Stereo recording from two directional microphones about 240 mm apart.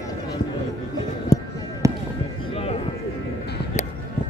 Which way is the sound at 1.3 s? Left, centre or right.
Left.